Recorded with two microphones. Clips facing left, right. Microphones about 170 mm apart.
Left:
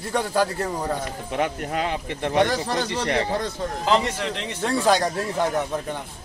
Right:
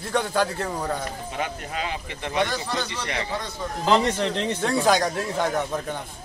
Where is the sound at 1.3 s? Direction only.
50° left (ahead or behind).